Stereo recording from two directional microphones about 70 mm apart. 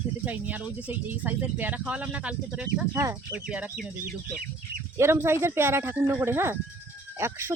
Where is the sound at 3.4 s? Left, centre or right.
Centre.